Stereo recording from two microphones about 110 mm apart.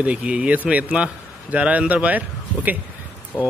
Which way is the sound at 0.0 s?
10° right (ahead or behind).